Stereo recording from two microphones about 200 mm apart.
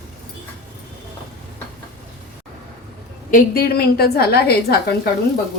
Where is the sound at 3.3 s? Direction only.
45° left (ahead or behind).